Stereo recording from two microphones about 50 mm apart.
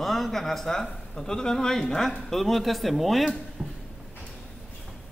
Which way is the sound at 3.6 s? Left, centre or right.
Centre.